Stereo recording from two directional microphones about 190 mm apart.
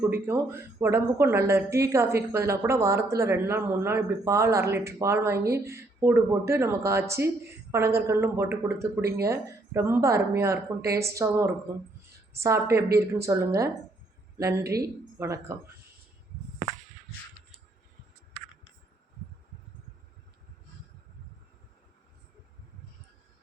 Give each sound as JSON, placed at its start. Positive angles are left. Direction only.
{"t": 0.0, "sound": "speech", "side_deg": -15}